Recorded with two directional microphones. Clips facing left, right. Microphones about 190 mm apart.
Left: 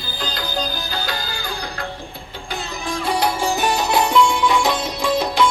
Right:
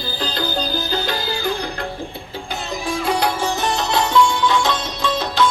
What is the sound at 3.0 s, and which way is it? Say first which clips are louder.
Music: even; centre (ahead or behind).